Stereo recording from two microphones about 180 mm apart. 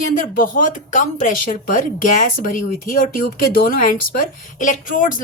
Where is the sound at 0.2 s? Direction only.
50° left (ahead or behind).